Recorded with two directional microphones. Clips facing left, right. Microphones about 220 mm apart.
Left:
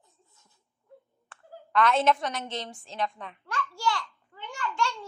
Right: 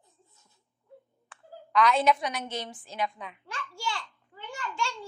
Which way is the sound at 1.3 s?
Centre (ahead or behind).